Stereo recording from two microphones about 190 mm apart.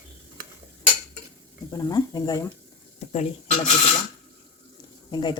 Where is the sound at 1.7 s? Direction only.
20° left (ahead or behind).